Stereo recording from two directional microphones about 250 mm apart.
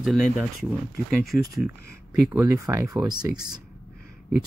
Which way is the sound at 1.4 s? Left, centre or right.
Centre.